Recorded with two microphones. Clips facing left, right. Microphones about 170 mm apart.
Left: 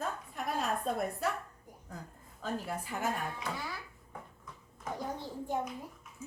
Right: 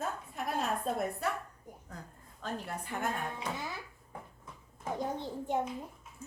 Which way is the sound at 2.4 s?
Centre (ahead or behind).